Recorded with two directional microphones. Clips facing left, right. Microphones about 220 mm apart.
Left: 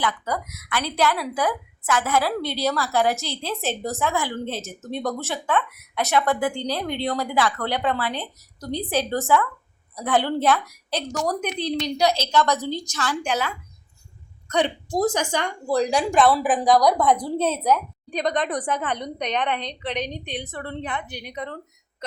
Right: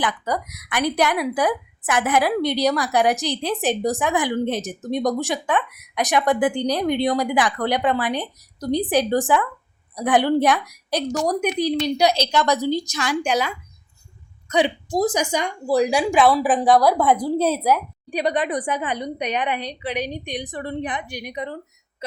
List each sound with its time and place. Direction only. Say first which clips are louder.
0.0 s a woman's voice: right 2 dB; 15° right (ahead or behind)
14.5 s a woman's voice: right 2 dB; 10° right (ahead or behind)